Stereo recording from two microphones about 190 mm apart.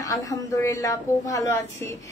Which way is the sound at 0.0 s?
15° left (ahead or behind).